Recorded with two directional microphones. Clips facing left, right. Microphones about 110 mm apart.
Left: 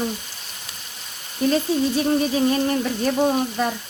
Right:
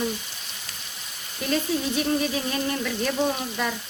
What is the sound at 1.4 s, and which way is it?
Speech, 40° left (ahead or behind).